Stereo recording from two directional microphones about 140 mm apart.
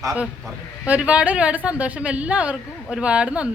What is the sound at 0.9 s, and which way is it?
A woman's voice, 10° right (ahead or behind).